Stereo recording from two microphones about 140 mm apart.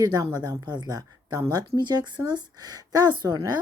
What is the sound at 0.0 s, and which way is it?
Speech, 25° right (ahead or behind).